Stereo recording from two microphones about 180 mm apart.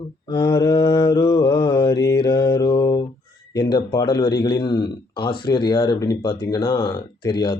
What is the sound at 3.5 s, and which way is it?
Speech, 25° left (ahead or behind).